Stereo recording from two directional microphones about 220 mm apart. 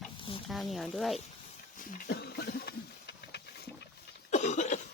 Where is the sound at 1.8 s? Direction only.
40° left (ahead or behind).